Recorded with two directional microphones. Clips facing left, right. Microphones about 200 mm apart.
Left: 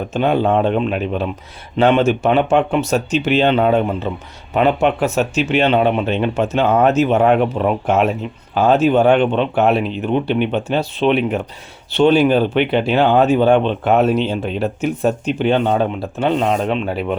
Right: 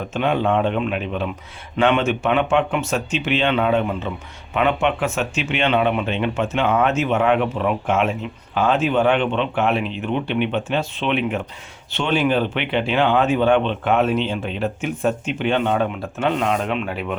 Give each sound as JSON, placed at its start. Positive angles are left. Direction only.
{"t": 0.1, "sound": "speech", "side_deg": 35}